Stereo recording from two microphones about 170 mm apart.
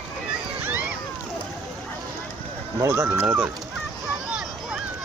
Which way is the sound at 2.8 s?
15° right (ahead or behind).